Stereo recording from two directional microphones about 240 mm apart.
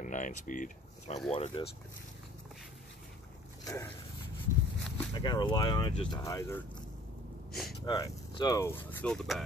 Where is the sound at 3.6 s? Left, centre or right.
Centre.